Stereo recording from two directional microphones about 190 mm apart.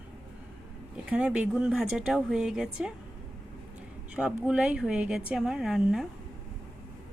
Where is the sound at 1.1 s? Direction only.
5° right (ahead or behind).